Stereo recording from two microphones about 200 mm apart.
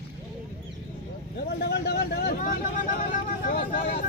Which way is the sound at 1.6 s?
55° left (ahead or behind).